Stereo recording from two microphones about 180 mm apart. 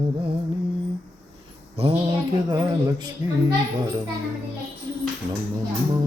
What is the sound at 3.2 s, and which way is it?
Speech, 15° right (ahead or behind).